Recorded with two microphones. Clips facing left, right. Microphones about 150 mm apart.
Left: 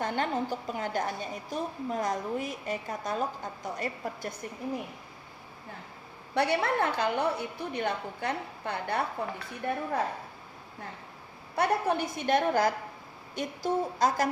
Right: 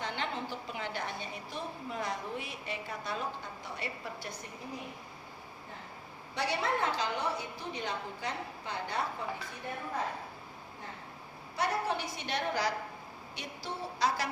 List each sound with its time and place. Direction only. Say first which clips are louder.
0.0 s a woman's voice: left 7 dB; 45° left (ahead or behind)
6.3 s a woman's voice: left 6 dB; 60° left (ahead or behind)
11.5 s a woman's voice: left 6 dB; 55° left (ahead or behind)